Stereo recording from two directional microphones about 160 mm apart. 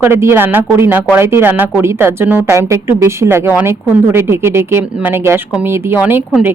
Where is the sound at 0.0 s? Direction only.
15° right (ahead or behind).